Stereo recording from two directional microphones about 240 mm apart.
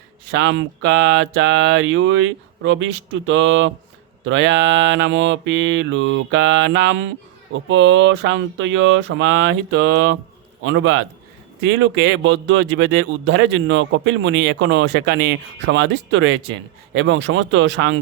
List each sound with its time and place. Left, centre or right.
0.3 s speech: right